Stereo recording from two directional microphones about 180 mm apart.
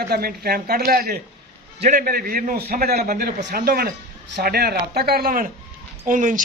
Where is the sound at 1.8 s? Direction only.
45° right (ahead or behind).